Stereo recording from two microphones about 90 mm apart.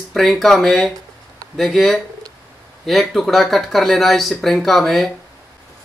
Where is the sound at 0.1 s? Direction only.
Centre (ahead or behind).